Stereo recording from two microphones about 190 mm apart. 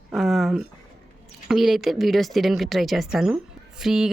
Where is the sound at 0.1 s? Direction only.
Centre (ahead or behind).